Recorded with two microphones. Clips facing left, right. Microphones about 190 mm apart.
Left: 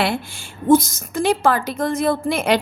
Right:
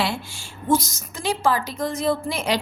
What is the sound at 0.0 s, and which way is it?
A woman's voice, 55° left (ahead or behind).